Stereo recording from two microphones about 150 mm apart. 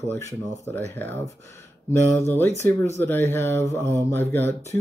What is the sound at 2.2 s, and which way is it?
Speech, 15° left (ahead or behind).